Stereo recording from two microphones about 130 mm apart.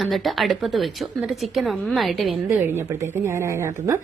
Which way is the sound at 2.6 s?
20° right (ahead or behind).